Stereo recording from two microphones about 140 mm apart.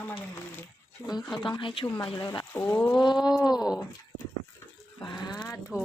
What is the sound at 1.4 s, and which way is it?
Speech, 35° left (ahead or behind).